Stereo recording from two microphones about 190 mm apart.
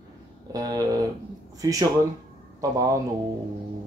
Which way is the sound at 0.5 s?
20° right (ahead or behind).